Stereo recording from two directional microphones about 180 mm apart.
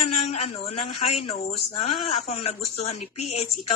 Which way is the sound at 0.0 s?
35° left (ahead or behind).